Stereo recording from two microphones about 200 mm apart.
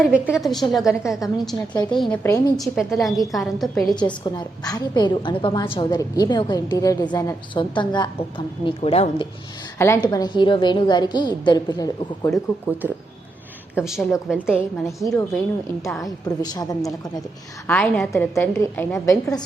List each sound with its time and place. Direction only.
0.0 s a woman's voice: 5° right (ahead or behind)
3.9 s a woman's voice: 20° left (ahead or behind)
9.7 s a woman's voice: 15° left (ahead or behind)
13.7 s a woman's voice: centre (ahead or behind)
16.0 s a woman's voice: 20° left (ahead or behind)
17.7 s a woman's voice: 5° left (ahead or behind)